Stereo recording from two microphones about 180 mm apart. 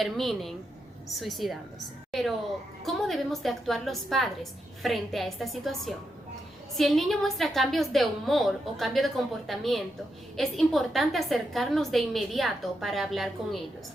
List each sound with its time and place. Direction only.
0.0 s a woman's voice: centre (ahead or behind)